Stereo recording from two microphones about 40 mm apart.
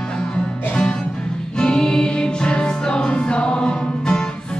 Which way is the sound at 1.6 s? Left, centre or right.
Centre.